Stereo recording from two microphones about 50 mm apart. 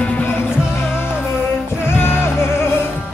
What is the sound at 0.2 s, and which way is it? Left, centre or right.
Music, left.